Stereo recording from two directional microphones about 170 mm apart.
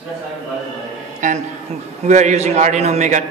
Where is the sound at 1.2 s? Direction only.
45° right (ahead or behind).